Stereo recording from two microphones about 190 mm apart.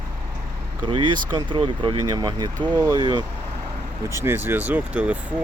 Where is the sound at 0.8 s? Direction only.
25° right (ahead or behind).